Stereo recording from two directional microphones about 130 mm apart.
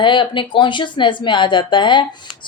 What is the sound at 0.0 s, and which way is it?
A woman's voice, 40° left (ahead or behind).